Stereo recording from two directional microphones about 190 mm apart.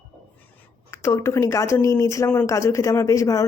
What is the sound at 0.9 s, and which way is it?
Speech, 15° left (ahead or behind).